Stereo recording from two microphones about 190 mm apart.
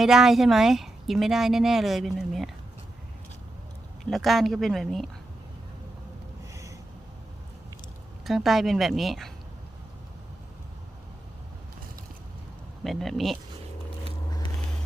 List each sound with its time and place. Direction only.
0.0 s speech: centre (ahead or behind)
4.0 s speech: centre (ahead or behind)
6.5 s a sound: 15° right (ahead or behind)
8.2 s speech: centre (ahead or behind)
12.8 s speech: centre (ahead or behind)